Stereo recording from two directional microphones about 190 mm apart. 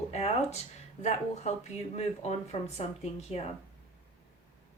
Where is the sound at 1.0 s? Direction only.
35° left (ahead or behind).